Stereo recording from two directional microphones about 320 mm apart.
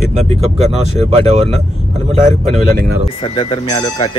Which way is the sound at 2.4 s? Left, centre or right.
Right.